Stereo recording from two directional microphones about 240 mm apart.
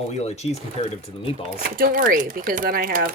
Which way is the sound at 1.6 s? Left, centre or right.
Right.